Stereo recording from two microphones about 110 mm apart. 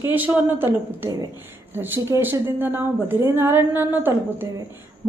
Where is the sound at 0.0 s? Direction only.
15° right (ahead or behind).